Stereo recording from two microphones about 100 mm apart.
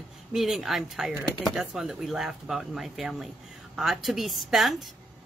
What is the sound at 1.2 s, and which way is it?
Speech, 50° left (ahead or behind).